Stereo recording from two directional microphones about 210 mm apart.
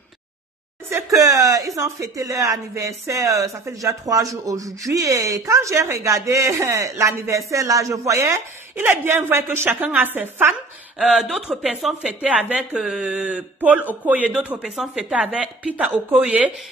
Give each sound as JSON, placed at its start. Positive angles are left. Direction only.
{"t": 0.8, "sound": "a woman's voice", "side_deg": -15}